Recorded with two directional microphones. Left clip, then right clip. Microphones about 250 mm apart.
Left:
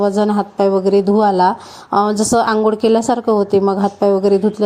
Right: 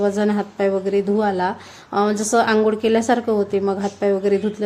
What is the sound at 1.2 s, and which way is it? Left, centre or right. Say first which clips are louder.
Speech: left 7 dB; centre.